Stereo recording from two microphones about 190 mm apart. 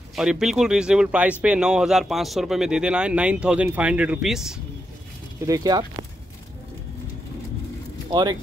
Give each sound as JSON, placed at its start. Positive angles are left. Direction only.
{"t": 0.1, "sound": "speech", "side_deg": -5}
{"t": 5.4, "sound": "speech", "side_deg": -20}
{"t": 8.1, "sound": "speech", "side_deg": -20}